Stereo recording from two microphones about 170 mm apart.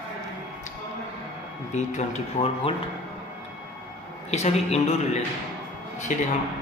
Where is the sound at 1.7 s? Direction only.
45° left (ahead or behind).